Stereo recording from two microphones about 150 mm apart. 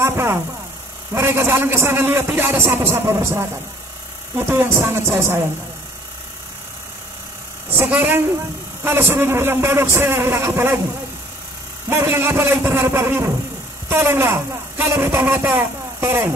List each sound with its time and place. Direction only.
0.0 s a man's voice: 15° right (ahead or behind)
7.7 s a man's voice: 15° right (ahead or behind)
11.9 s a man's voice: 15° right (ahead or behind)